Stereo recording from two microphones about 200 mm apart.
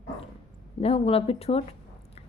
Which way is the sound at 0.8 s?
30° left (ahead or behind).